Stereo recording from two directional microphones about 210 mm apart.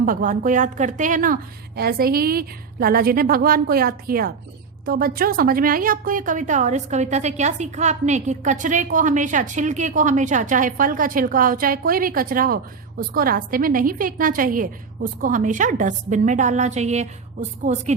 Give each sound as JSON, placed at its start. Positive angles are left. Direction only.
{"t": 0.0, "sound": "a woman's voice", "side_deg": -40}